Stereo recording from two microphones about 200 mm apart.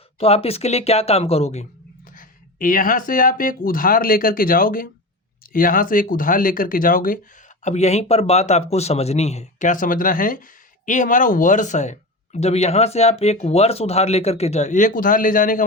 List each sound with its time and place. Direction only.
0.2 s speech: 30° left (ahead or behind)
2.1 s speech: 45° left (ahead or behind)